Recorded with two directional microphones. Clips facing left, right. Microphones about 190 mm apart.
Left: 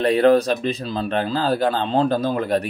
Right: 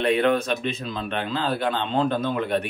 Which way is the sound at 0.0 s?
35° left (ahead or behind).